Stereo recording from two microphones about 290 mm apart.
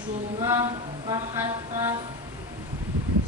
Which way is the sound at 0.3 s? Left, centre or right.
Centre.